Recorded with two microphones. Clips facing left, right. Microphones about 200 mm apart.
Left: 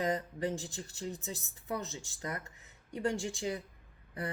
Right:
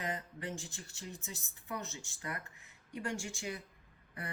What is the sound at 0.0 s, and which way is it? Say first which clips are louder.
Speech: left 8 dB; 35° left (ahead or behind).